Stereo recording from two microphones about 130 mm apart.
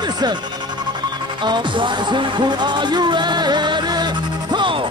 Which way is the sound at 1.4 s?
35° right (ahead or behind).